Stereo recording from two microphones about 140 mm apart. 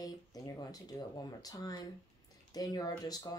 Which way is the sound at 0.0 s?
25° left (ahead or behind).